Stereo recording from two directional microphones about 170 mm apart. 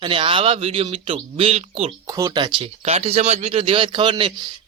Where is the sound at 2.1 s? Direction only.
20° right (ahead or behind).